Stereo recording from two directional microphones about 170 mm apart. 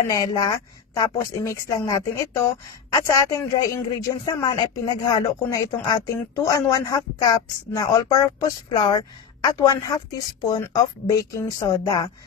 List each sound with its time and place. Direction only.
0.1 s speech: 20° left (ahead or behind)